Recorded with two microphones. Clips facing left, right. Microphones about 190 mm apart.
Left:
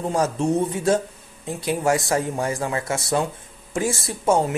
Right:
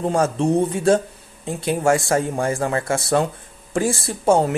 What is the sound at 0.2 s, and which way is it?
Speech, 30° right (ahead or behind).